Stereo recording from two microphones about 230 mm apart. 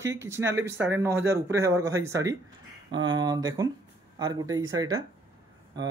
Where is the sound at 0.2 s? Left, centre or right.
Centre.